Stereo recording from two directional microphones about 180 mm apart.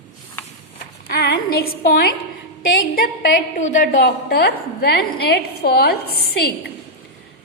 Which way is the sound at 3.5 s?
45° left (ahead or behind).